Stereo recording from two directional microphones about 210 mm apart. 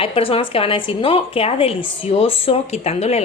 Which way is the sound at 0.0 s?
25° left (ahead or behind).